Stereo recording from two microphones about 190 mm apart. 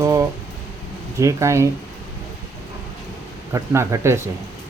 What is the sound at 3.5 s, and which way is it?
Speech, 15° right (ahead or behind).